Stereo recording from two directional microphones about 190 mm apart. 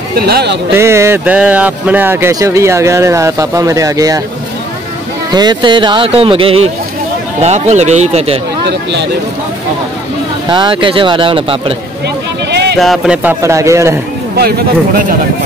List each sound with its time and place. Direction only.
0.2 s speech: 55° right (ahead or behind)
0.7 s speech: 15° right (ahead or behind)
5.3 s speech: 20° right (ahead or behind)
10.5 s speech: 25° right (ahead or behind)
12.4 s a sound: 60° right (ahead or behind)
12.7 s speech: centre (ahead or behind); by 13.9 s 15° right (ahead or behind)